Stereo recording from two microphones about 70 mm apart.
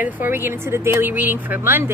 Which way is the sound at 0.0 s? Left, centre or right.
Right.